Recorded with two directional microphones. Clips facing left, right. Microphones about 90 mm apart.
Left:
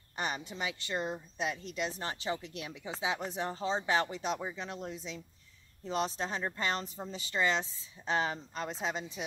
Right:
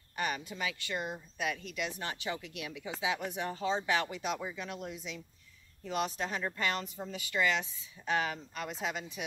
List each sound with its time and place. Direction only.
0.1 s speech: 25° left (ahead or behind)